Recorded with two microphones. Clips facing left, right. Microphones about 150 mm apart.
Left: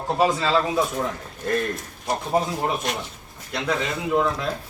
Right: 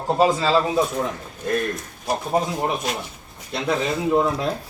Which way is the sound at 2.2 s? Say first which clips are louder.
Even; 10° right (ahead or behind).